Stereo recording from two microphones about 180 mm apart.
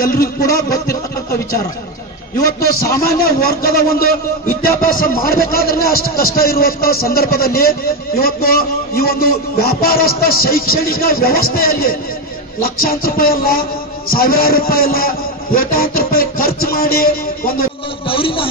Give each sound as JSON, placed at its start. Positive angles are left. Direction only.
{"t": 3.0, "sound": "a man's voice", "side_deg": 55}
{"t": 18.0, "sound": "a man's voice", "side_deg": 30}